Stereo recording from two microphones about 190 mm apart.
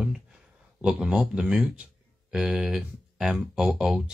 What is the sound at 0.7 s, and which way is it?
Speech, 5° right (ahead or behind).